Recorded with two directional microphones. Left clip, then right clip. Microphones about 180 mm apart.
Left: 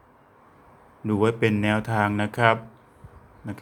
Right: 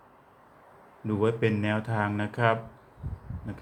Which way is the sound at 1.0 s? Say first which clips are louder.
Left 4 dB; 30° left (ahead or behind).